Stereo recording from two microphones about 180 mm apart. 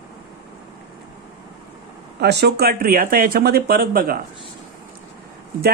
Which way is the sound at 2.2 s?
65° right (ahead or behind).